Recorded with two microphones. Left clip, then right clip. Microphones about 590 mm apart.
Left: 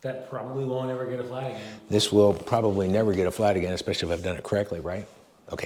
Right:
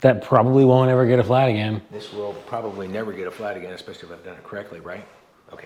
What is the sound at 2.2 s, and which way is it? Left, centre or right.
Speech, left.